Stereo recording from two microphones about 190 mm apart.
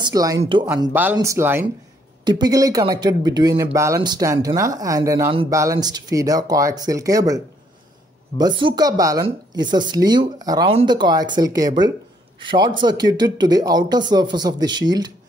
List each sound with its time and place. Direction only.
0.0 s speech: 20° right (ahead or behind)
0.9 s speech: 10° right (ahead or behind)